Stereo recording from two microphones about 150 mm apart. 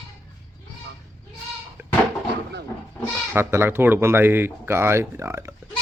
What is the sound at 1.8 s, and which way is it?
Goat, 15° right (ahead or behind).